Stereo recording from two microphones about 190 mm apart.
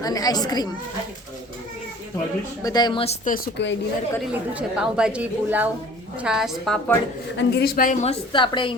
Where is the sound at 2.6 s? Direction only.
20° left (ahead or behind).